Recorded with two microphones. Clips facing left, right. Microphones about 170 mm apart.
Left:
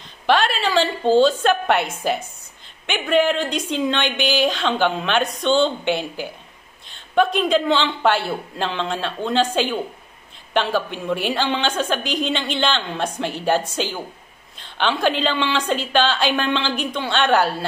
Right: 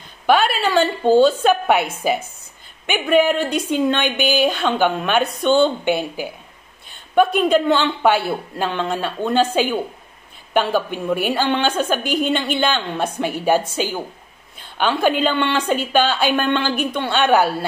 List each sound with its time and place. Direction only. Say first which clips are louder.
0.3 s a woman's voice: right 2 dB; 5° right (ahead or behind)